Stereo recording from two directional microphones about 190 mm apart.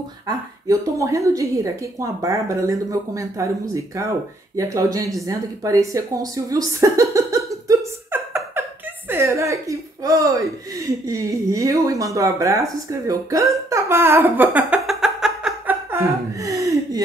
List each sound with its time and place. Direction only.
0.7 s speech: 15° right (ahead or behind)
9.1 s a sound: 15° right (ahead or behind)
11.1 s speech: 15° right (ahead or behind)
12.9 s hiccup: 15° right (ahead or behind)